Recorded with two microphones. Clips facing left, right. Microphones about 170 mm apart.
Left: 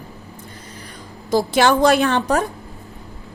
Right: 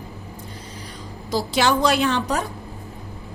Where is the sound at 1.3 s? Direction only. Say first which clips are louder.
Left 4 dB; 55° left (ahead or behind).